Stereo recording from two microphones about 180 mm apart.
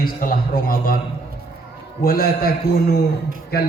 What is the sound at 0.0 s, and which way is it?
Speech, 50° left (ahead or behind).